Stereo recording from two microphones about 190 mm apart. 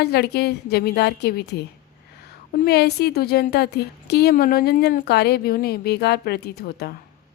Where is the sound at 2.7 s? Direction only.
60° left (ahead or behind).